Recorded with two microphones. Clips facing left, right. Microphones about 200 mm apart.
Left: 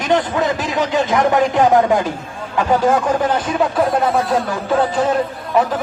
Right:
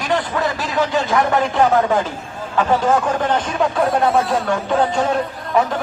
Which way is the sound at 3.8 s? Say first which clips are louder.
Right 3 dB; centre (ahead or behind).